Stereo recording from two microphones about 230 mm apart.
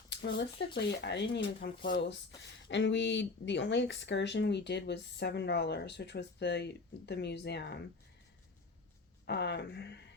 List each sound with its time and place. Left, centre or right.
0.1 s speech: left
9.2 s speech: left